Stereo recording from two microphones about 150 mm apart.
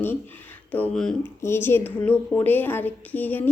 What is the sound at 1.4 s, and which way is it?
A woman's voice, 15° left (ahead or behind).